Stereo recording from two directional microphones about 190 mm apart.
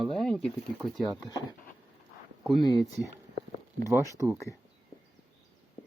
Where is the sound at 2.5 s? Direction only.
20° left (ahead or behind).